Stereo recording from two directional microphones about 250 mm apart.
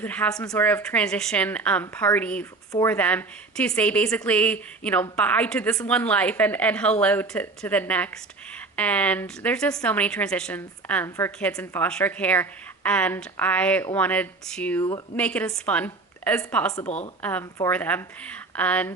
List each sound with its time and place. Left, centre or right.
0.0 s a woman's voice: centre
16.8 s a woman's voice: left
17.2 s a woman's voice: centre